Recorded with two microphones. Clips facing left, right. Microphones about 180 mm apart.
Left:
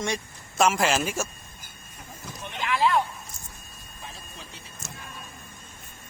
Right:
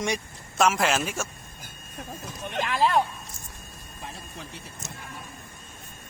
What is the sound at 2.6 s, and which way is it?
Speech, 40° right (ahead or behind).